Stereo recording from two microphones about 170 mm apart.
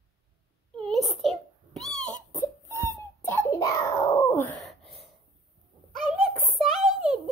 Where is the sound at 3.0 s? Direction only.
15° left (ahead or behind).